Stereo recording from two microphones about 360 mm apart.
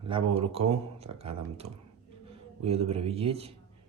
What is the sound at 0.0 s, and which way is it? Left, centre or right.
Speech, centre.